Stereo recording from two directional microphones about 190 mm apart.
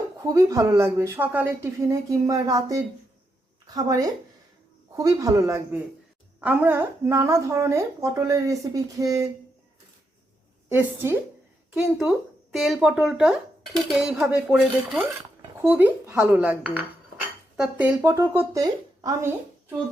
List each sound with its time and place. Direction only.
0.2 s a man's voice: 20° right (ahead or behind)
10.7 s speech: 10° right (ahead or behind)